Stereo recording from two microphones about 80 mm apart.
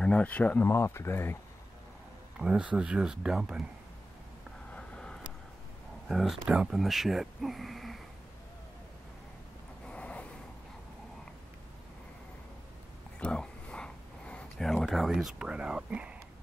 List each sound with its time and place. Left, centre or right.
0.0 s speech: centre
0.7 s speech: left
2.3 s speech: centre
4.7 s vehicle: centre
6.0 s speech: centre
9.8 s vehicle: centre
13.2 s a sound: centre
15.4 s speech: centre